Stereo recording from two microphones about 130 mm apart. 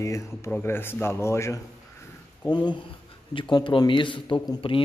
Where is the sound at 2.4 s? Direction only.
35° left (ahead or behind).